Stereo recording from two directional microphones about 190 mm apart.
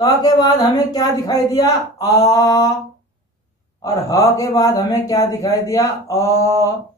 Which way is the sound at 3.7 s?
20° left (ahead or behind).